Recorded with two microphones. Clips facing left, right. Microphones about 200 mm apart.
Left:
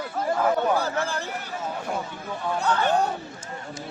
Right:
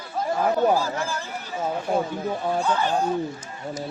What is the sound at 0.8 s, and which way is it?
Speech, 60° left (ahead or behind).